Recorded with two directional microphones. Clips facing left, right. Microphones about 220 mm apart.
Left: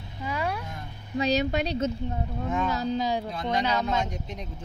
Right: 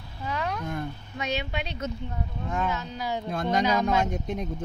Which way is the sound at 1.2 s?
40° left (ahead or behind).